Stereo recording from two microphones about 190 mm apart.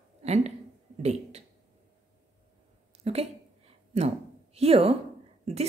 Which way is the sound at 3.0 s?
35° right (ahead or behind).